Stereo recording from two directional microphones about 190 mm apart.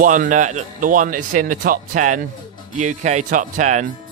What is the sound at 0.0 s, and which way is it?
Speech, 45° right (ahead or behind).